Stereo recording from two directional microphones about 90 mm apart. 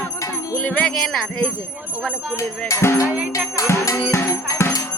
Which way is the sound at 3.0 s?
15° right (ahead or behind).